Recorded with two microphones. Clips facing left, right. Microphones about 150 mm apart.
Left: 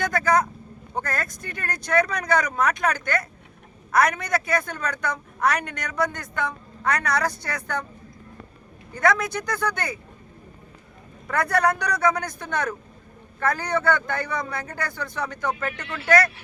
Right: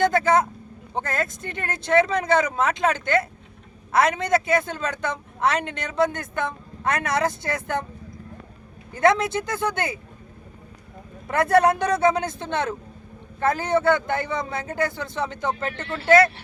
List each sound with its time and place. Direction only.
0.0 s vehicle: 25° right (ahead or behind)
0.9 s speech: 25° right (ahead or behind)
9.0 s speech: 25° right (ahead or behind)
11.3 s speech: 25° right (ahead or behind)